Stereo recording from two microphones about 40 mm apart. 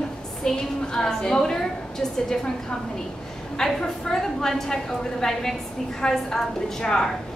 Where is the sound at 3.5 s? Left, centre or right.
Centre.